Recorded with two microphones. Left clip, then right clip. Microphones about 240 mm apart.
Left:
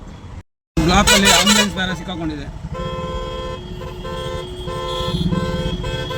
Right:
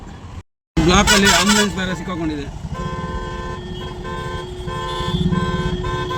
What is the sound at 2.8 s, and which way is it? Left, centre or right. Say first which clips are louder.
Vehicle: left 2 dB; left.